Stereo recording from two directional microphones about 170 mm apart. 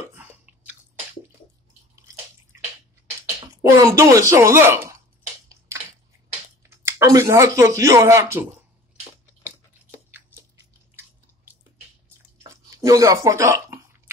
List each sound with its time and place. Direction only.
0.0 s biting: 10° right (ahead or behind)
3.7 s speech: 20° right (ahead or behind)
6.6 s speech: 15° right (ahead or behind)
9.4 s a sound: 10° right (ahead or behind)
12.4 s chewing: 20° right (ahead or behind)